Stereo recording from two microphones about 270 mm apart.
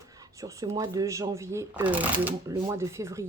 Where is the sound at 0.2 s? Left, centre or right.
Centre.